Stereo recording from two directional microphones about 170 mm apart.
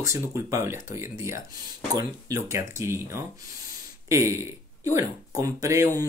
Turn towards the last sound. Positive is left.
turn(degrees=-20)  # may be behind; listen again after turning